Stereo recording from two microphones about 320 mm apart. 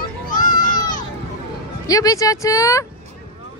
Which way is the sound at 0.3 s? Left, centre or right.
Left.